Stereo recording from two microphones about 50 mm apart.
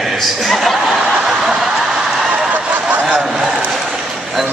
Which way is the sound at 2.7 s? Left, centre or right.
Right.